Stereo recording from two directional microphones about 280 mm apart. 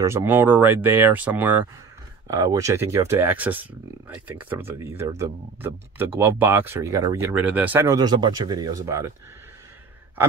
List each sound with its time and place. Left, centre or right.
0.0 s speech: centre